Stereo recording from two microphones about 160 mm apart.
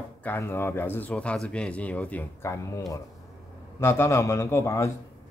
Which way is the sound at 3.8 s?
15° left (ahead or behind).